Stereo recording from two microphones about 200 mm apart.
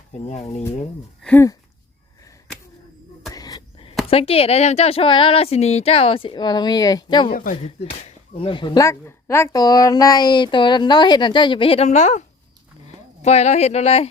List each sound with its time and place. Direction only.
1.2 s speech: 10° left (ahead or behind)
3.3 s a sound: 20° left (ahead or behind)
4.1 s speech: 30° left (ahead or behind)
7.3 s speech: 45° left (ahead or behind)
13.2 s speech: 35° left (ahead or behind)